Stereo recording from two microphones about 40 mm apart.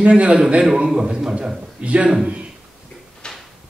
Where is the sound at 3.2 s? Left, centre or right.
Left.